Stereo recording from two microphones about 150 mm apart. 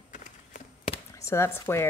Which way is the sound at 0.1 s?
60° left (ahead or behind).